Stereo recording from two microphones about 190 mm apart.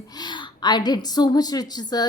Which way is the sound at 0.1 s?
20° left (ahead or behind).